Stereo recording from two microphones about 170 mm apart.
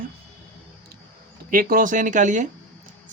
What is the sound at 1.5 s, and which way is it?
Speech, 55° right (ahead or behind).